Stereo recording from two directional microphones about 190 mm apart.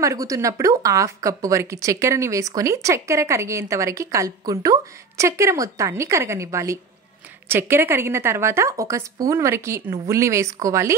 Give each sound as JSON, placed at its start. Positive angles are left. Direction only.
{"t": 0.0, "sound": "speech", "side_deg": -15}